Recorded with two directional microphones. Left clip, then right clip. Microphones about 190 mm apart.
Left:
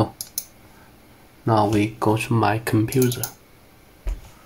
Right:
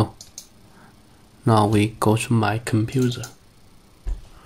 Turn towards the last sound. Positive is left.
turn(degrees=-5)  # may be behind; listen again after turning